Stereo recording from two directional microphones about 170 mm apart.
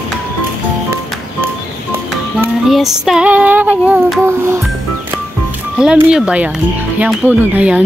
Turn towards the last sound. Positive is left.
turn(degrees=-10)  # may be behind; listen again after turning